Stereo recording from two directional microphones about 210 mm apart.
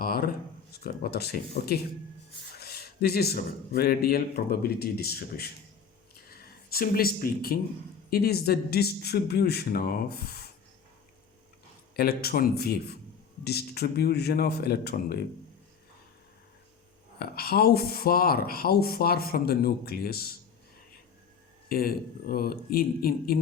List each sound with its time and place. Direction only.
0.0 s a sound: 45° left (ahead or behind)
0.7 s speech: 50° left (ahead or behind)
11.9 s speech: 45° left (ahead or behind)
17.2 s speech: 45° left (ahead or behind)
21.7 s speech: 45° left (ahead or behind)